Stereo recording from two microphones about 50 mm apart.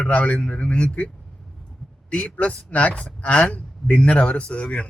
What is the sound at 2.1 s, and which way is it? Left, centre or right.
A man's voice, left.